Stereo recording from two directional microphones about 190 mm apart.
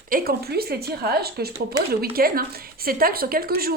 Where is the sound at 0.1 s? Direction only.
55° right (ahead or behind).